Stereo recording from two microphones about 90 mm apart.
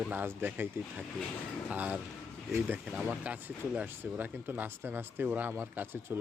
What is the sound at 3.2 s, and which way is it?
Speech, 20° right (ahead or behind).